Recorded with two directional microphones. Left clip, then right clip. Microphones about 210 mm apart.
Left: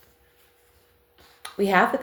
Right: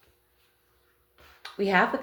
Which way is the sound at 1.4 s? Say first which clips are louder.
Left 3 dB; 35° left (ahead or behind).